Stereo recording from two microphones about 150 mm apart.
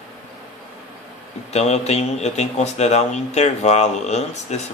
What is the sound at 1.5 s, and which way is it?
A man's voice, 45° left (ahead or behind).